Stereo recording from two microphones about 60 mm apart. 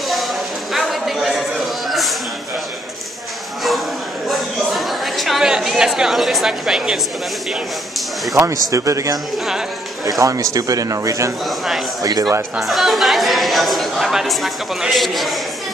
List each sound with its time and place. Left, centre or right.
0.1 s a sound: centre
1.9 s music: centre
4.3 s a sound: centre
5.5 s speech: centre
8.4 s speech: right
10.0 s a man's voice: right
11.4 s speech: centre
12.0 s speech: right
12.5 s speech: centre